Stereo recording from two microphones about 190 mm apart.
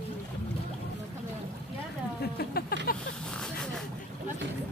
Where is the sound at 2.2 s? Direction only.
55° left (ahead or behind).